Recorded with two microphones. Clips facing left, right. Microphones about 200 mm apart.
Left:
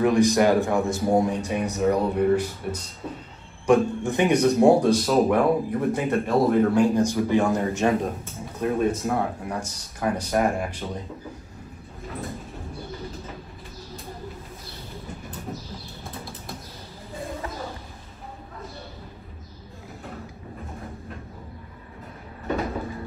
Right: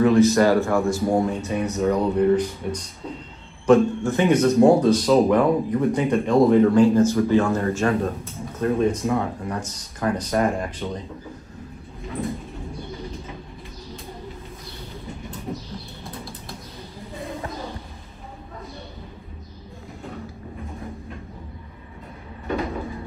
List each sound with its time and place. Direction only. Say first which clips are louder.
0.0 s speech: right 3 dB; 15° left (ahead or behind)
16.0 s bird flight: right 1 dB; centre (ahead or behind)